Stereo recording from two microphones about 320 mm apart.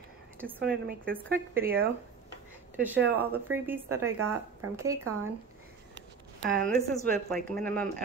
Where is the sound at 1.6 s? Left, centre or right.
Right.